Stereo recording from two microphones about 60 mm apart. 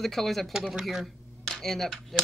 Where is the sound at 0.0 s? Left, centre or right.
Centre.